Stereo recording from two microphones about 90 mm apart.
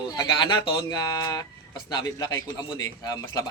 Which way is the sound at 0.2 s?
50° left (ahead or behind).